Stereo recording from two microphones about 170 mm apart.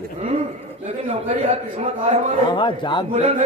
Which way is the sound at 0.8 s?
35° right (ahead or behind).